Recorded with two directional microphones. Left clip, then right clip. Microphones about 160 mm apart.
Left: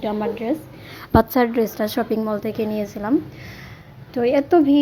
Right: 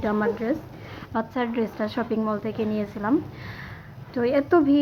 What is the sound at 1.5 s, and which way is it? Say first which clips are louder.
A woman's voice: left 6 dB; 45° left (ahead or behind).